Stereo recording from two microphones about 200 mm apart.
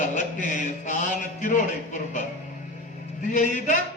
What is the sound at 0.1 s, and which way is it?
Mantra, 40° left (ahead or behind).